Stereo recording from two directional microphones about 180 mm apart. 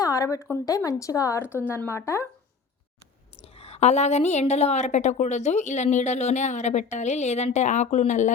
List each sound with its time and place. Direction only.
0.0 s speech: 20° left (ahead or behind)
3.4 s a woman's voice: 35° left (ahead or behind)